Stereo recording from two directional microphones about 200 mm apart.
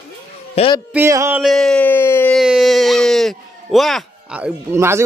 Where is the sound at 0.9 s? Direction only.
15° right (ahead or behind).